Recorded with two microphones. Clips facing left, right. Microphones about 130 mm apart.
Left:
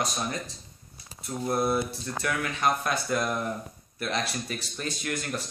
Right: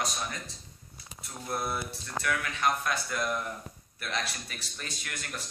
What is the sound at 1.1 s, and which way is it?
Speech, 30° left (ahead or behind).